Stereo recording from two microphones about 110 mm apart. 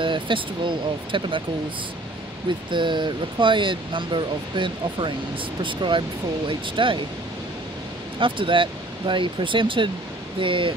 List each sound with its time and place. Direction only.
0.0 s speech: 50° right (ahead or behind)
2.7 s speech: 45° right (ahead or behind)
8.2 s speech: 50° right (ahead or behind)